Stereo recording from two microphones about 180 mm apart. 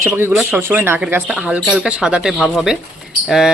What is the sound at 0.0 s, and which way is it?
Speech, 15° right (ahead or behind).